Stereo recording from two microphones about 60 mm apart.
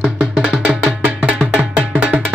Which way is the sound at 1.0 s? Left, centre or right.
Right.